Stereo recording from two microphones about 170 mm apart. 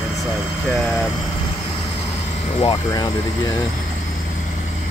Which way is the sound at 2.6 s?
25° left (ahead or behind).